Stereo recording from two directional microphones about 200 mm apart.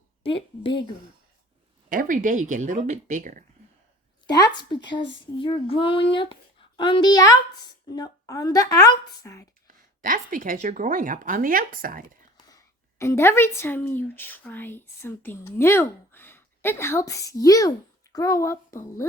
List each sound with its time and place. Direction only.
0.2 s a child's voice: 25° left (ahead or behind)
1.9 s speech: 45° right (ahead or behind)
4.3 s a child's voice: 20° left (ahead or behind)
10.0 s speech: 40° right (ahead or behind)
12.5 s a woman's voice: 15° left (ahead or behind)